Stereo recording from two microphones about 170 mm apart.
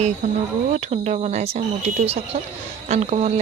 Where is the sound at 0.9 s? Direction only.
40° right (ahead or behind).